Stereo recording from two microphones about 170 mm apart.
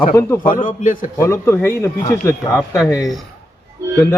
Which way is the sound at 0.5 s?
50° left (ahead or behind).